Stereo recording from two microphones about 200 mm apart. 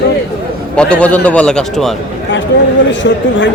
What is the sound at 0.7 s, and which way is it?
A man's voice, 5° left (ahead or behind).